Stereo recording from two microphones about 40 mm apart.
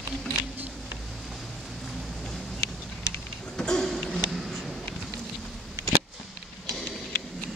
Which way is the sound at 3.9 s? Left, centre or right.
Centre.